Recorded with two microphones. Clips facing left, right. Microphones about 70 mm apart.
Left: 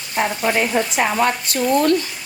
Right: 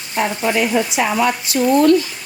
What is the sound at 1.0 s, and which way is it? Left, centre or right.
Speech, left.